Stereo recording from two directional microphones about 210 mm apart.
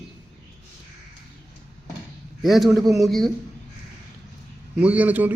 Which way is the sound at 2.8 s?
15° right (ahead or behind).